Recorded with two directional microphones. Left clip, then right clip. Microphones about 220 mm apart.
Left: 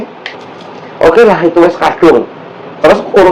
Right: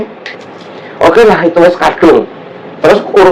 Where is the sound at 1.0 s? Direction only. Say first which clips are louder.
Even; 25° right (ahead or behind).